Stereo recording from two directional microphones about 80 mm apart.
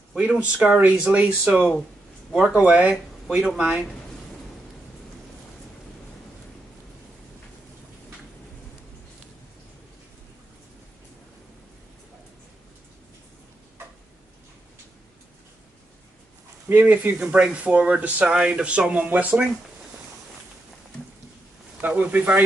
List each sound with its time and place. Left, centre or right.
0.1 s speech: centre
16.6 s speech: right
21.8 s speech: right